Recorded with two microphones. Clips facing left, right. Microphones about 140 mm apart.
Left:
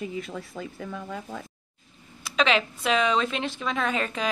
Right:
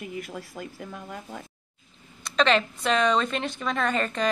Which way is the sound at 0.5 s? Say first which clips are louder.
Left 2 dB; 75° left (ahead or behind).